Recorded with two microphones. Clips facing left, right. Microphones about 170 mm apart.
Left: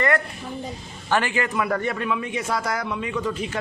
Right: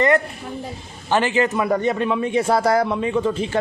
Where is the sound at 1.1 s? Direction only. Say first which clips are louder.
Right 4 dB; 20° right (ahead or behind).